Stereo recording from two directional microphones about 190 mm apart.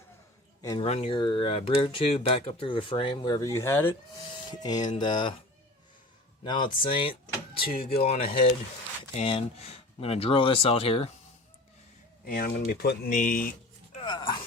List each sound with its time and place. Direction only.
0.8 s speech: 30° left (ahead or behind)
6.4 s speech: 25° left (ahead or behind)
12.2 s speech: 50° left (ahead or behind)
13.9 s speech: 25° left (ahead or behind)